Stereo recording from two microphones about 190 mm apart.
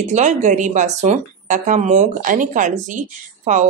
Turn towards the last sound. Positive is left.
turn(degrees=-40)  # may be behind; listen again after turning